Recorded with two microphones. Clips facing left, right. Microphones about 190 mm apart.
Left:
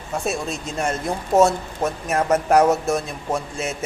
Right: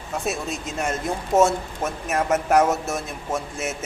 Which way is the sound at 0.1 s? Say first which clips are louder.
Left 2 dB; centre (ahead or behind).